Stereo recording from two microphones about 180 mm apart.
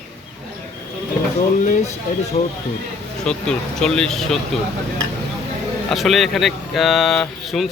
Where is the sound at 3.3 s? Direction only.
5° left (ahead or behind).